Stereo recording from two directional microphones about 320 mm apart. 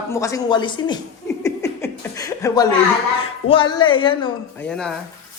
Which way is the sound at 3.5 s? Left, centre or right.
Centre.